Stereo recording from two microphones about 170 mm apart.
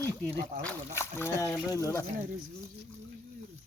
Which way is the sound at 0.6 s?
15° left (ahead or behind).